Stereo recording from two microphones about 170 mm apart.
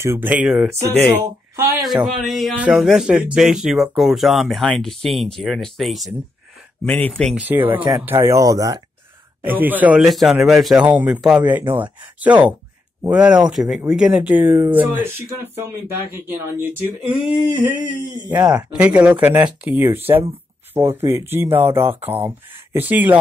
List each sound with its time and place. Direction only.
0.0 s speech: 15° right (ahead or behind); by 7.3 s 5° left (ahead or behind)
7.3 s speech: 10° right (ahead or behind)
18.3 s speech: 10° right (ahead or behind)